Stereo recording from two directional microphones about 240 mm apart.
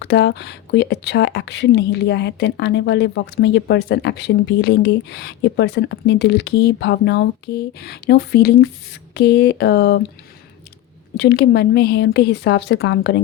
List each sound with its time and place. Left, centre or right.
0.0 s speech: left
11.2 s speech: left